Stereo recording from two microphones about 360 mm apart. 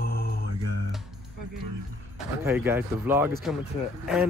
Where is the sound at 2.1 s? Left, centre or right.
Centre.